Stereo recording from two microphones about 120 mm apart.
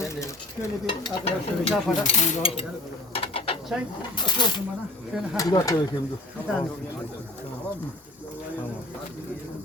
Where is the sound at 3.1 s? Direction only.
50° left (ahead or behind).